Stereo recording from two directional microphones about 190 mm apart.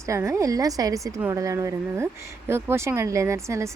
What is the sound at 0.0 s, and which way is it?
Speech, 15° right (ahead or behind).